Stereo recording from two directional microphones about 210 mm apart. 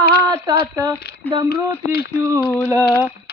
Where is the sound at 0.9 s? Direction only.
50° left (ahead or behind).